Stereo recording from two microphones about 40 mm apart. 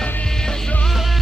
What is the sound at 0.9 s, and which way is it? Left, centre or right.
Music, centre.